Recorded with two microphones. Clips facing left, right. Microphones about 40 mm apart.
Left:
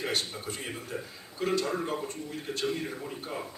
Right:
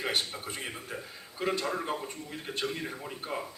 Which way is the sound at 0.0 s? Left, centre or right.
Centre.